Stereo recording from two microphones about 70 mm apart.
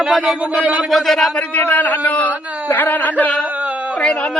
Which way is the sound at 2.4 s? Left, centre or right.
Right.